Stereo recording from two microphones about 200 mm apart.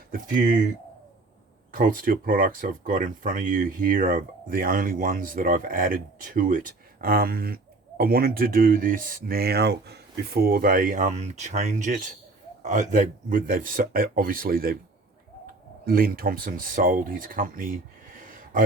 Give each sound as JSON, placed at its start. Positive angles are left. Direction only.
{"t": 1.7, "sound": "speech", "side_deg": -45}
{"t": 15.9, "sound": "speech", "side_deg": -45}
{"t": 18.1, "sound": "a sound", "side_deg": -45}